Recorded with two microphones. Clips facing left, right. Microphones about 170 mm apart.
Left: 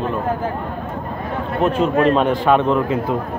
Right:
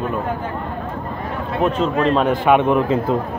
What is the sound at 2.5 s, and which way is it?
Speech, 15° right (ahead or behind).